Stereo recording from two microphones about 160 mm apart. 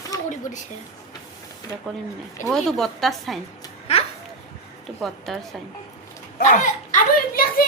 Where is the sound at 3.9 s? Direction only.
40° left (ahead or behind).